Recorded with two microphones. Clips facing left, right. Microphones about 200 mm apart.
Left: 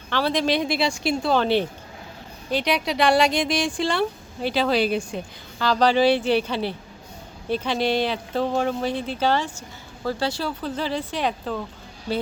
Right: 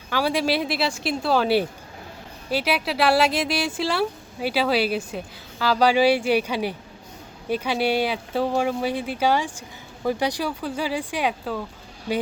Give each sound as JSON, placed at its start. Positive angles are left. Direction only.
{"t": 0.1, "sound": "speech", "side_deg": -10}